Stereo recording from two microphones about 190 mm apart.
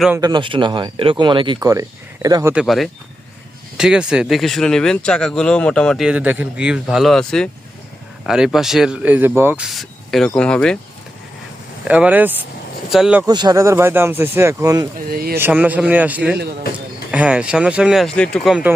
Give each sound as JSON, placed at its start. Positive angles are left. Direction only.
{"t": 0.2, "sound": "speech", "side_deg": -20}
{"t": 2.6, "sound": "speech", "side_deg": 0}
{"t": 11.9, "sound": "speech", "side_deg": -5}
{"t": 13.2, "sound": "speech", "side_deg": -20}